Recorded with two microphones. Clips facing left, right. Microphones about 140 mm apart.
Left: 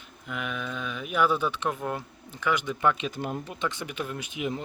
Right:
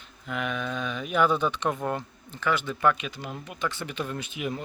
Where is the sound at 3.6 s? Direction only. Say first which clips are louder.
Right 3 dB; 15° left (ahead or behind).